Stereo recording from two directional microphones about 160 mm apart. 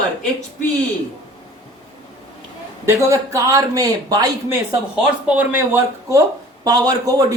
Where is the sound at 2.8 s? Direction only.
15° right (ahead or behind).